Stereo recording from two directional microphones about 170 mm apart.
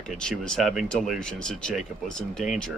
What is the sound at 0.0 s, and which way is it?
Speech, 5° left (ahead or behind).